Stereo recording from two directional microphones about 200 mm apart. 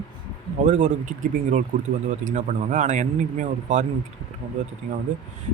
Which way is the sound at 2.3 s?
40° right (ahead or behind).